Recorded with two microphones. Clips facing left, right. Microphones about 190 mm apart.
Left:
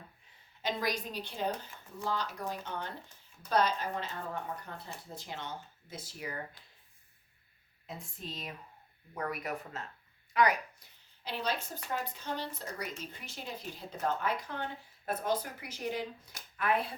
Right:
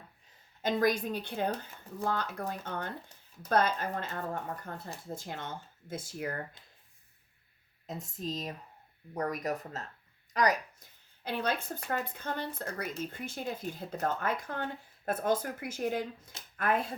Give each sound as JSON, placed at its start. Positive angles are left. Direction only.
{"t": 0.6, "sound": "speech", "side_deg": -50}
{"t": 7.9, "sound": "speech", "side_deg": -40}